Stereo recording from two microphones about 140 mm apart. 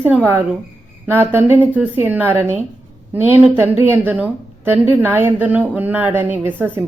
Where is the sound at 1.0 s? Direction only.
15° right (ahead or behind).